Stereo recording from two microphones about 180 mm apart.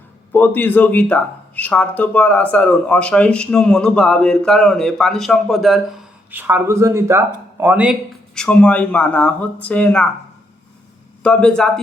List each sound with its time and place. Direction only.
0.3 s speech: 10° left (ahead or behind)
6.3 s speech: 10° right (ahead or behind)
8.4 s speech: 5° left (ahead or behind)
11.2 s speech: 5° left (ahead or behind)